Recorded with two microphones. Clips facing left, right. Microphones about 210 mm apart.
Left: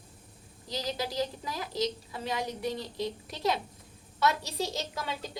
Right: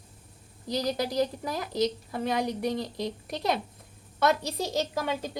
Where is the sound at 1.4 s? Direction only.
45° right (ahead or behind).